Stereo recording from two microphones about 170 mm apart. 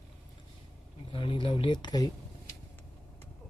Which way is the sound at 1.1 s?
30° left (ahead or behind).